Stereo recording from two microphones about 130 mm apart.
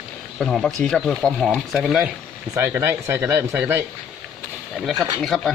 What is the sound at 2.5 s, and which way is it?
Speech, 20° right (ahead or behind).